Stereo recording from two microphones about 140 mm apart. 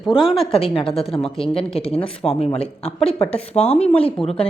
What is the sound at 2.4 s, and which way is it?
Speech, 45° left (ahead or behind).